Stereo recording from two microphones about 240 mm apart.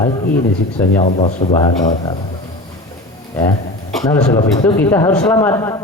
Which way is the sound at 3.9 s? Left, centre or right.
Centre.